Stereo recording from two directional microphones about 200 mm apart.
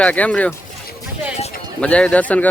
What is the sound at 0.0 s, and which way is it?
Speech, 5° left (ahead or behind).